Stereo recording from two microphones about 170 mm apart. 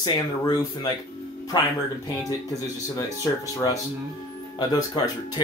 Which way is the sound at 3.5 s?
20° left (ahead or behind).